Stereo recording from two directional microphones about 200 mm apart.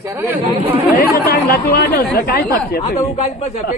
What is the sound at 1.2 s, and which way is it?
Speech, 50° left (ahead or behind).